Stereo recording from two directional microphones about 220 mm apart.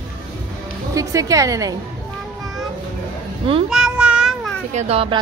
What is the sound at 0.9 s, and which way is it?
Speech, 15° right (ahead or behind).